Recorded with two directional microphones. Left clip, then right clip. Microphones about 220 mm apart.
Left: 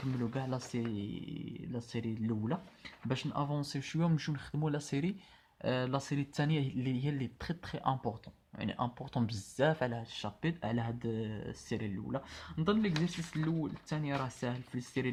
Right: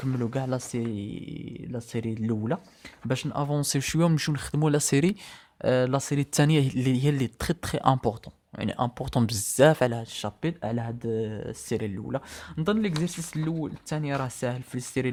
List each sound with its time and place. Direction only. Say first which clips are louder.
0.0 s speech: right 8 dB; 45° right (ahead or behind)